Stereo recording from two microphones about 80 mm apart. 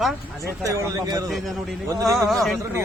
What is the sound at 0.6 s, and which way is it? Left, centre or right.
Speech, right.